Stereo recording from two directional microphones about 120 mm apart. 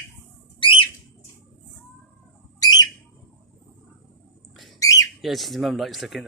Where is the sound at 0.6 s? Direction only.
45° left (ahead or behind).